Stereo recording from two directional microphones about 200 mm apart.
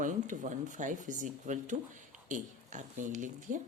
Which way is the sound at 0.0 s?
40° right (ahead or behind).